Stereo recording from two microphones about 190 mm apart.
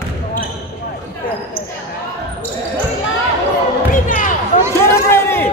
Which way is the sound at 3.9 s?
45° left (ahead or behind).